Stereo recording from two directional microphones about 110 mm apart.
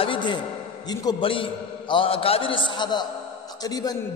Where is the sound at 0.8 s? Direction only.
35° left (ahead or behind).